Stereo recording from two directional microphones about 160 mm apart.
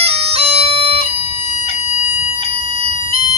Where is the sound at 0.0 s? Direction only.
40° right (ahead or behind).